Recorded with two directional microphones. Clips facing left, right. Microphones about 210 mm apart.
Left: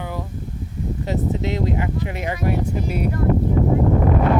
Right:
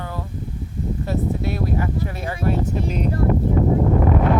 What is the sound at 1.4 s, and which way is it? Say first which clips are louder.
Speech: left 1 dB; 20° left (ahead or behind).